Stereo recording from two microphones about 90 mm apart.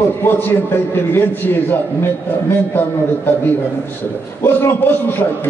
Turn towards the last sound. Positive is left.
turn(degrees=25)  # may be behind; listen again after turning